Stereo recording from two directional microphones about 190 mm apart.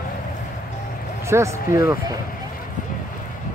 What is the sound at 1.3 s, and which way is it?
Speech, 15° right (ahead or behind).